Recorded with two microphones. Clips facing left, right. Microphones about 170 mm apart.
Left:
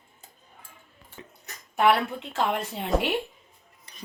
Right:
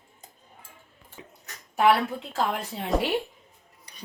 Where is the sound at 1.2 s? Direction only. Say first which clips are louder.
Left 1 dB; 5° right (ahead or behind).